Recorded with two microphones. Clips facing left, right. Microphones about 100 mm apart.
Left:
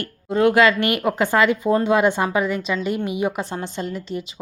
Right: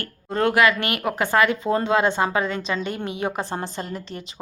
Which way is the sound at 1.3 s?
20° left (ahead or behind).